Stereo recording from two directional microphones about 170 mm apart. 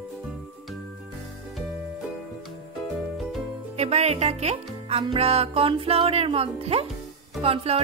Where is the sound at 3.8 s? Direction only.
40° right (ahead or behind).